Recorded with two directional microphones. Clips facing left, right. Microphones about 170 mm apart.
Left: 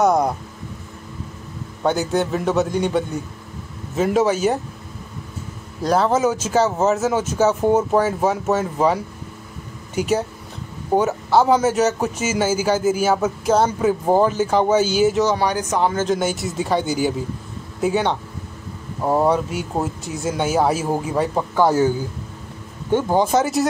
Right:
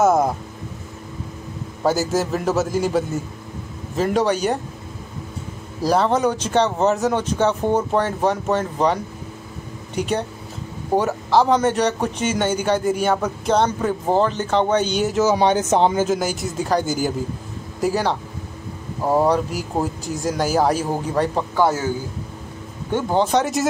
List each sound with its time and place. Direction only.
0.0 s a man's voice: 5° right (ahead or behind)
1.8 s a man's voice: centre (ahead or behind)
5.8 s a man's voice: centre (ahead or behind)
15.3 s speech: 25° right (ahead or behind)
16.0 s a man's voice: centre (ahead or behind)